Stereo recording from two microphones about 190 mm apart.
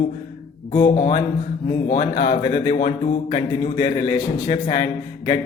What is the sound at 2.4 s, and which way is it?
A man's voice, 30° left (ahead or behind).